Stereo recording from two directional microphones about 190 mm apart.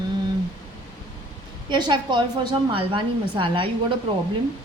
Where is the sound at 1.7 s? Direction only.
25° right (ahead or behind).